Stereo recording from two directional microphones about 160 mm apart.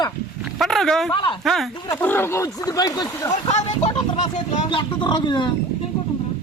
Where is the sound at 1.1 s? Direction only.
30° left (ahead or behind).